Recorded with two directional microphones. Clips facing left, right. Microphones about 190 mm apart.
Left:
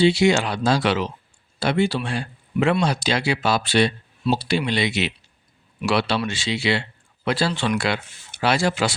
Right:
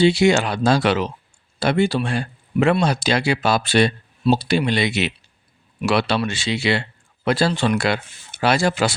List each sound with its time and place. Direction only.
0.0 s speech: 45° right (ahead or behind)